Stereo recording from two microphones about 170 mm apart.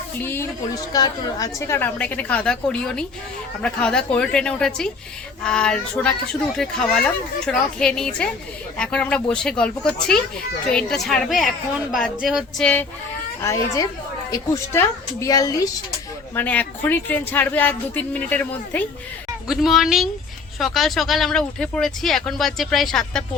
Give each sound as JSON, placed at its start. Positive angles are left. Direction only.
{"t": 0.2, "sound": "a woman's voice", "side_deg": 15}
{"t": 13.4, "sound": "a woman's voice", "side_deg": 15}
{"t": 16.3, "sound": "a woman's voice", "side_deg": 10}
{"t": 19.5, "sound": "speech", "side_deg": 0}